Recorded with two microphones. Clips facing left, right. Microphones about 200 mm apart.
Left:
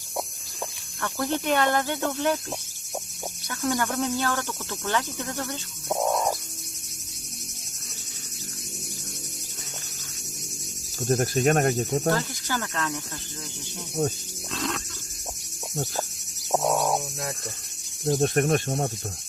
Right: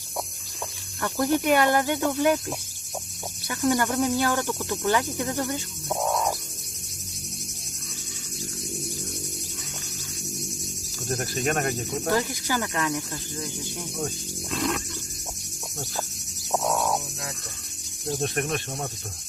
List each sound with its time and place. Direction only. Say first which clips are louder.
1.0 s cricket: right 4 dB; 15° right (ahead or behind)
3.5 s insect: right 3 dB; 10° right (ahead or behind)
4.0 s cricket: right 3 dB; 15° right (ahead or behind)
11.1 s cricket: left 5 dB; 45° left (ahead or behind)
12.1 s cricket: right 3 dB; 10° right (ahead or behind)
14.0 s speech: left 6 dB; 40° left (ahead or behind)
14.5 s a sound: right 3 dB; 10° right (ahead or behind)
18.2 s cricket: left 5 dB; 45° left (ahead or behind)